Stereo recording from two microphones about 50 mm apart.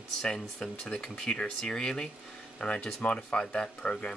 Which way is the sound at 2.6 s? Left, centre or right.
Left.